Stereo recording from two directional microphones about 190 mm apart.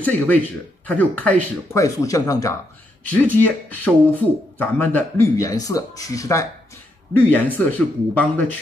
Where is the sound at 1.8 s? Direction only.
20° left (ahead or behind).